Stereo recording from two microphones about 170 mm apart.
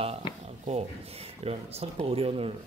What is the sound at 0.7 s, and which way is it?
Speech, 35° right (ahead or behind).